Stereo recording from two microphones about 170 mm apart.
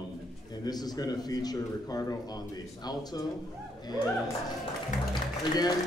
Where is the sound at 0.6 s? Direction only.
25° left (ahead or behind).